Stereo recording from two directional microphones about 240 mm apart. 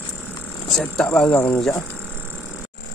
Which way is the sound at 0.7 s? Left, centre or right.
Centre.